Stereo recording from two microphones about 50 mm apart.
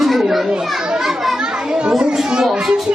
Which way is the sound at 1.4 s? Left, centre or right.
Centre.